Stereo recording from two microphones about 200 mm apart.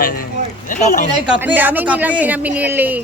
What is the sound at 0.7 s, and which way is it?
Speech, 40° left (ahead or behind).